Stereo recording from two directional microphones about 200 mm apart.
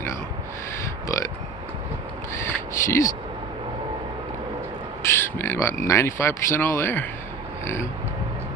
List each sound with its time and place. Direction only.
1.0 s speech: 15° left (ahead or behind)
2.3 s crow: 15° left (ahead or behind)
5.0 s speech: 10° left (ahead or behind)
7.6 s oink: 15° left (ahead or behind)